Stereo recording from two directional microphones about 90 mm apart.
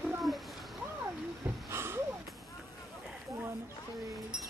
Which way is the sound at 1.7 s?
30° right (ahead or behind).